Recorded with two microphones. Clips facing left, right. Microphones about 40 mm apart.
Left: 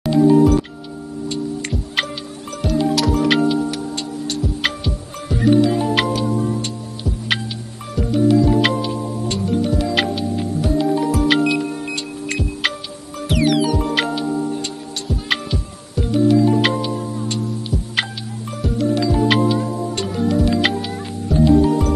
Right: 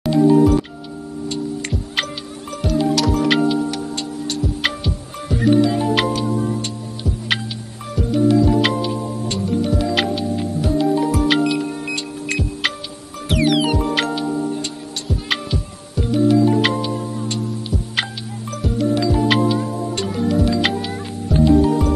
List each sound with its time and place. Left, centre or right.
0.0 s music: centre
2.6 s music: centre
13.7 s music: centre